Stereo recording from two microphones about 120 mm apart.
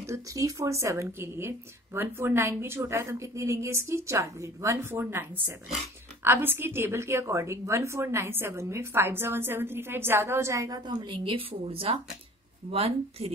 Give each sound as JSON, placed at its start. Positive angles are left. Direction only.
{"t": 0.0, "sound": "a woman's voice", "side_deg": -25}